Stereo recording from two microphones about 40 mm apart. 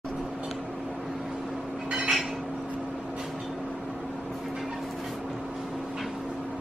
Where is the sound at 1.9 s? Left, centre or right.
Right.